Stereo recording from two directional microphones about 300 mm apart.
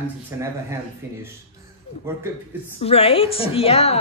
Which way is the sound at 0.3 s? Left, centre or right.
Centre.